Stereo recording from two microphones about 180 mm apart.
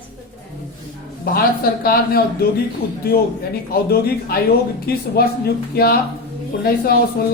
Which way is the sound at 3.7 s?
60° left (ahead or behind).